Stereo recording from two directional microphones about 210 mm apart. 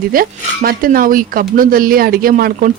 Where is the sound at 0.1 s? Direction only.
45° right (ahead or behind).